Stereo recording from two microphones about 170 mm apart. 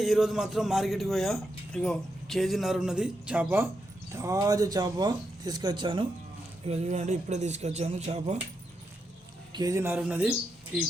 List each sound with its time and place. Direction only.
0.0 s speech: centre (ahead or behind); by 6.1 s 30° right (ahead or behind)
6.7 s speech: 40° right (ahead or behind)
9.5 s speech: 25° right (ahead or behind); by 10.3 s 5° right (ahead or behind)